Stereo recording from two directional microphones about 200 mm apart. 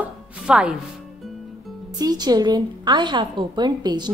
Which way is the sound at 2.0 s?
20° right (ahead or behind).